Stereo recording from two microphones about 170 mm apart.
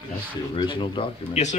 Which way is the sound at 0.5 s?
30° left (ahead or behind).